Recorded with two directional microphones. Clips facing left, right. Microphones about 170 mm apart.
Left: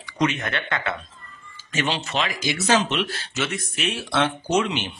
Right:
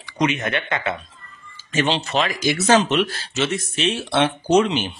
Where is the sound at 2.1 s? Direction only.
45° right (ahead or behind).